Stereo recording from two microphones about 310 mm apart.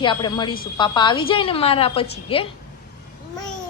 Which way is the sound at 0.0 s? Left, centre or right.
Centre.